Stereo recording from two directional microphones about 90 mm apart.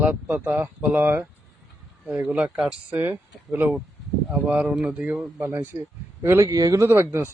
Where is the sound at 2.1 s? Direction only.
10° right (ahead or behind).